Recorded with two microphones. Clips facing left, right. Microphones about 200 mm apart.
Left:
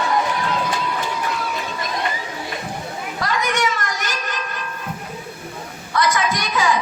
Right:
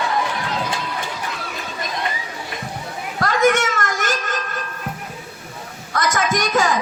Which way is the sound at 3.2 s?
50° right (ahead or behind).